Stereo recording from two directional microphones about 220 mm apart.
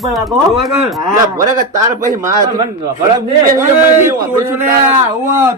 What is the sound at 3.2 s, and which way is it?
Speech, 15° right (ahead or behind).